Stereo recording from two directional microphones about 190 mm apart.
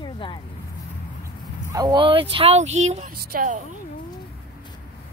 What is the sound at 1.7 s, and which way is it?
Speech, 20° right (ahead or behind).